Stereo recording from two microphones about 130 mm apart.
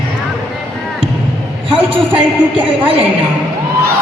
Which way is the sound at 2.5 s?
45° right (ahead or behind).